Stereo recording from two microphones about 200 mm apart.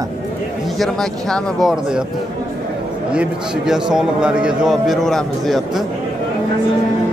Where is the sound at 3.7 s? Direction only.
5° right (ahead or behind).